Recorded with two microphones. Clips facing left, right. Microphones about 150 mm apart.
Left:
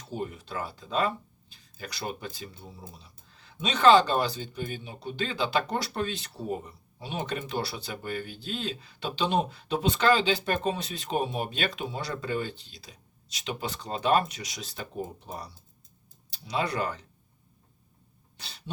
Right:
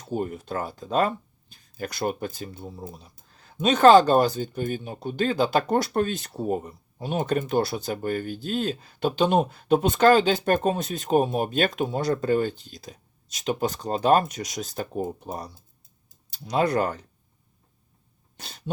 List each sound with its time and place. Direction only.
0.1 s speech: 50° right (ahead or behind)
18.3 s throat clearing: 45° right (ahead or behind)